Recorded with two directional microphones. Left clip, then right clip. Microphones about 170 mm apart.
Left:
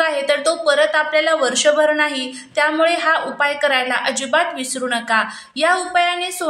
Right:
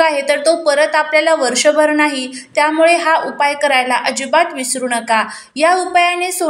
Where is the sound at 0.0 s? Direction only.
15° right (ahead or behind).